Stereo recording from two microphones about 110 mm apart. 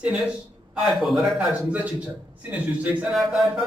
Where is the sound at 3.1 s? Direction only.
5° right (ahead or behind).